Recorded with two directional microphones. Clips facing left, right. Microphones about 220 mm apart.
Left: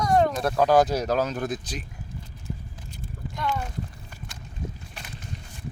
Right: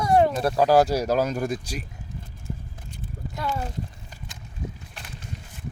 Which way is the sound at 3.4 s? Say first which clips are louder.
Even; 40° right (ahead or behind).